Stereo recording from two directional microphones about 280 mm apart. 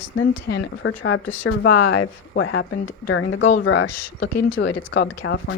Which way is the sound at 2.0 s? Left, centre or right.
Left.